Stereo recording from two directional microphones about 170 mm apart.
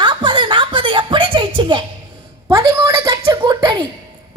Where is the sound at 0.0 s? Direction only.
30° right (ahead or behind).